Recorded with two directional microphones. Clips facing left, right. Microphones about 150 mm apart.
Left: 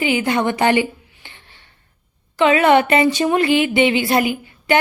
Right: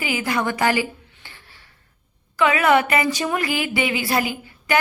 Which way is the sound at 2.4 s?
25° left (ahead or behind).